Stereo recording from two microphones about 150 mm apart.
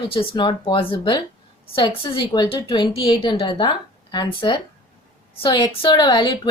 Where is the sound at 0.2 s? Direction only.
35° left (ahead or behind).